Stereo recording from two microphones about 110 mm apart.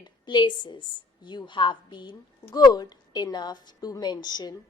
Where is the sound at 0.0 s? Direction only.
40° left (ahead or behind).